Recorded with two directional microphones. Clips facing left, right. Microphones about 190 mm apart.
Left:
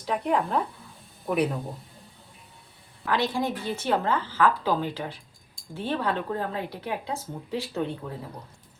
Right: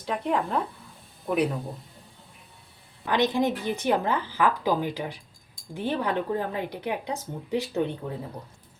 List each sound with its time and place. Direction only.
0.0 s speech: centre (ahead or behind)
3.0 s a woman's voice: 20° right (ahead or behind)